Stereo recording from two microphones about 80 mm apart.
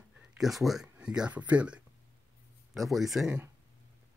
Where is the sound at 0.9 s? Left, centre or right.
Centre.